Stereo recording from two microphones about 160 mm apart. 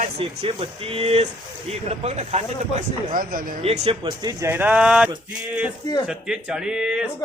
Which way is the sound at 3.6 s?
40° right (ahead or behind).